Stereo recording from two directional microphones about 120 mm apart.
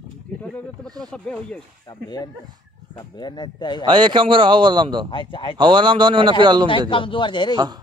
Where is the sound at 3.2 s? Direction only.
35° left (ahead or behind).